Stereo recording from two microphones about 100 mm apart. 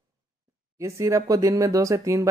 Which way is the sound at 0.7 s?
30° right (ahead or behind).